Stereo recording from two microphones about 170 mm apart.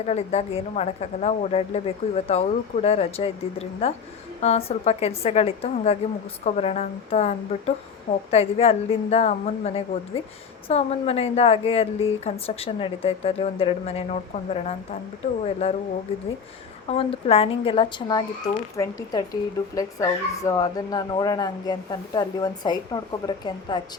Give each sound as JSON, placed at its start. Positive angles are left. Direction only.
{"t": 0.0, "sound": "a woman's voice", "side_deg": 40}
{"t": 16.9, "sound": "speech", "side_deg": 35}